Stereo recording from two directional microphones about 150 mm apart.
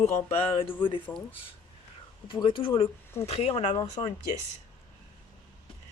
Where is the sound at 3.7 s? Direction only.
30° left (ahead or behind).